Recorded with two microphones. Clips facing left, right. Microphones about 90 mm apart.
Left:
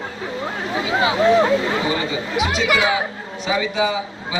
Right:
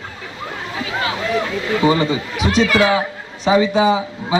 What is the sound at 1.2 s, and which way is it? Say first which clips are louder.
Speech: left 6 dB; 30° left (ahead or behind).